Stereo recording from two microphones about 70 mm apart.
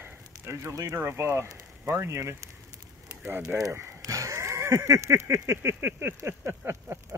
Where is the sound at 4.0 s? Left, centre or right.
Right.